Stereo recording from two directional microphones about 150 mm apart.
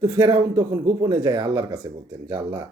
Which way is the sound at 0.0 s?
30° right (ahead or behind).